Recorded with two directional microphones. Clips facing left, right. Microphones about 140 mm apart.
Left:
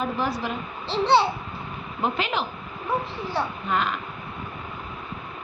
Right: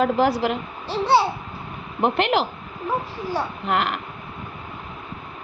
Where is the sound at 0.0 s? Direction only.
90° right.